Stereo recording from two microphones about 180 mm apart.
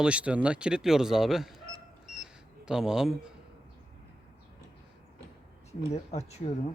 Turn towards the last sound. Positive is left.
turn(degrees=35)  # may be behind; listen again after turning